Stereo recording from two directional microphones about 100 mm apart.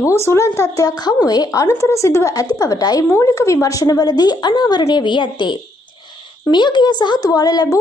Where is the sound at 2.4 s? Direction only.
40° left (ahead or behind).